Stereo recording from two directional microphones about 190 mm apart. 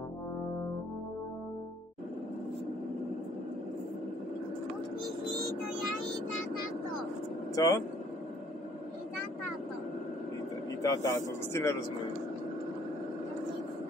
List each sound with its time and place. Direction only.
7.5 s speech: 20° left (ahead or behind)
10.8 s a man's voice: 15° left (ahead or behind)